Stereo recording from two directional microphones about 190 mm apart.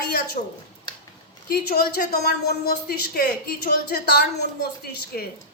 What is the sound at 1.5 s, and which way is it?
A woman's voice, 55° left (ahead or behind).